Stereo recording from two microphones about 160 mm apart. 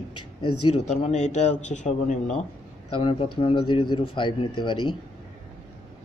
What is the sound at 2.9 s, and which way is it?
A man's voice, 35° left (ahead or behind).